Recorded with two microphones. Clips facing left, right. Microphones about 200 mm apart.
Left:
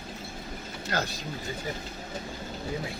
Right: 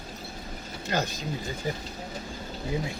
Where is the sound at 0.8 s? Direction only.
15° right (ahead or behind).